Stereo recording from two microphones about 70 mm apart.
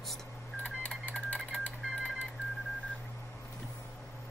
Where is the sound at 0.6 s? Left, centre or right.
Centre.